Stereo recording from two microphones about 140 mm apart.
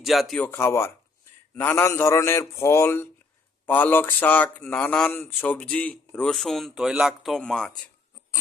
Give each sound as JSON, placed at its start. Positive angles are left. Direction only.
{"t": 0.0, "sound": "speech", "side_deg": 0}
{"t": 0.3, "sound": "a man's voice", "side_deg": 15}